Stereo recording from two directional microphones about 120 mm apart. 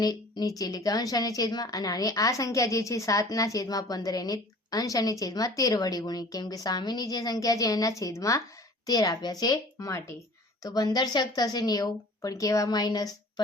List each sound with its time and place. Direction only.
0.0 s a woman's voice: 35° left (ahead or behind)